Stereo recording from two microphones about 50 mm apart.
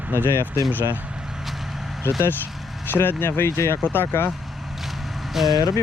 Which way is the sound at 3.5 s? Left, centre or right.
Left.